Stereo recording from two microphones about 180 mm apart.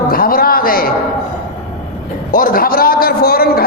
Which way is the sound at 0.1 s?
55° left (ahead or behind).